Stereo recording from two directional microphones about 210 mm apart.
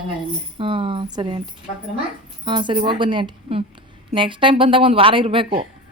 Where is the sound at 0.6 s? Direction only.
25° right (ahead or behind).